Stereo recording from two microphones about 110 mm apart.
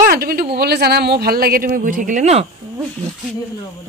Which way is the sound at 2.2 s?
75° right (ahead or behind).